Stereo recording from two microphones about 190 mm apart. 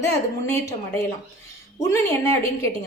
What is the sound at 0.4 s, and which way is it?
A woman's voice, 15° left (ahead or behind).